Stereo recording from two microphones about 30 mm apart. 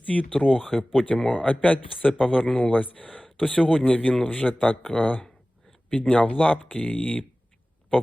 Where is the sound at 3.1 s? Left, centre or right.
Left.